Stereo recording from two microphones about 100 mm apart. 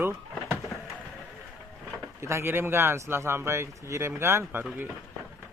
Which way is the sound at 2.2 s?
25° right (ahead or behind).